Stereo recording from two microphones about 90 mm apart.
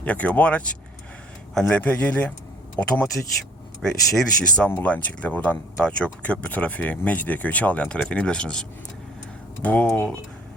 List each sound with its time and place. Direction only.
0.0 s speech: 15° left (ahead or behind)
4.7 s speech: 20° left (ahead or behind)